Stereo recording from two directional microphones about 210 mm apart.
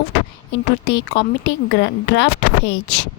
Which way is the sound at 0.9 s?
60° left (ahead or behind).